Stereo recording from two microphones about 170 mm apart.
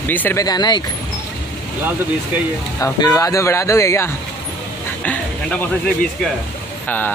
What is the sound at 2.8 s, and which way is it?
Speech, 20° left (ahead or behind).